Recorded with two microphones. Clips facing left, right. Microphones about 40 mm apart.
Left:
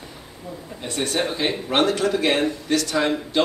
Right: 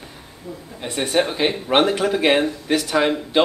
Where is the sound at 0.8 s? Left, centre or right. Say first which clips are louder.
Right 4 dB; centre.